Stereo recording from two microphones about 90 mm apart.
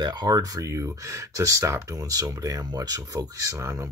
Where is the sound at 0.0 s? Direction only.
50° right (ahead or behind).